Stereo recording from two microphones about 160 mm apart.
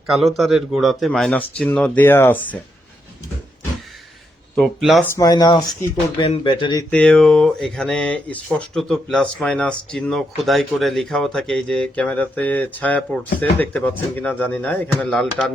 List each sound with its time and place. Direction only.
0.1 s speech: centre (ahead or behind)
4.5 s speech: centre (ahead or behind)
5.0 s speech: 20° left (ahead or behind)
6.9 s speech: 5° left (ahead or behind)